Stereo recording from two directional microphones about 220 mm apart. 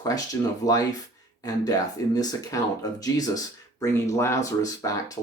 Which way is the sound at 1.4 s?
15° left (ahead or behind).